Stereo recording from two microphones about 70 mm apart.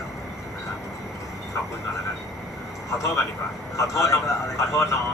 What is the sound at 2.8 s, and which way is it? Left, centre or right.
Speech, left.